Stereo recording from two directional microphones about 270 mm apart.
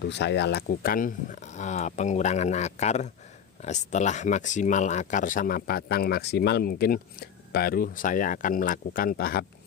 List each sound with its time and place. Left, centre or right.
0.0 s speech: left